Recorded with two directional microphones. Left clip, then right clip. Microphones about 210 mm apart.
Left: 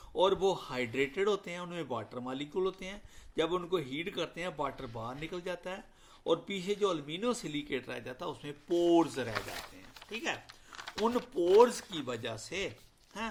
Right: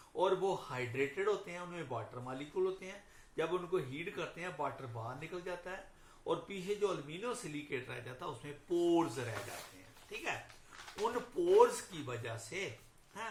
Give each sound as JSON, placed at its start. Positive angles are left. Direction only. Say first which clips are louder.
{"t": 0.2, "sound": "speech", "louder": "left 5 dB", "side_deg": 50}
{"t": 10.9, "sound": "speech", "louder": "left 5 dB", "side_deg": 55}